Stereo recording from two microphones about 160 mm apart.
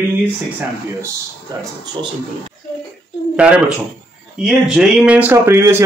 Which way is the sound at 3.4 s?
5° right (ahead or behind).